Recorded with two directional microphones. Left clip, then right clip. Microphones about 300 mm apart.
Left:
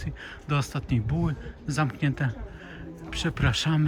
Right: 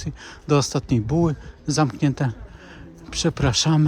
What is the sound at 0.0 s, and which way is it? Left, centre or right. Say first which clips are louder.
Speech: right 3 dB; centre.